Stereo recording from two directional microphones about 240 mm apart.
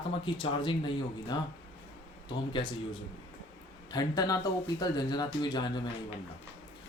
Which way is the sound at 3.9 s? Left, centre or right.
Centre.